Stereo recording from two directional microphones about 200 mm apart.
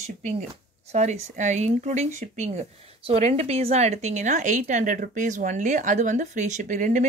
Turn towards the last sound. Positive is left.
turn(degrees=-40)  # may be behind; listen again after turning